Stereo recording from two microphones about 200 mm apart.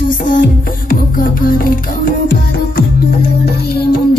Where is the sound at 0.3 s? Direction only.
45° left (ahead or behind).